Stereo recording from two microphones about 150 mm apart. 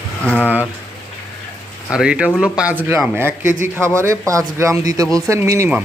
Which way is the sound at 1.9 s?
5° right (ahead or behind).